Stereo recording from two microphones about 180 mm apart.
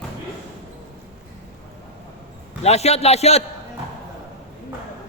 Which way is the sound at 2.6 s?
35° left (ahead or behind).